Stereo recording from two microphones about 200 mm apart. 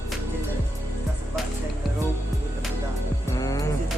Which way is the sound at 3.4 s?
15° left (ahead or behind).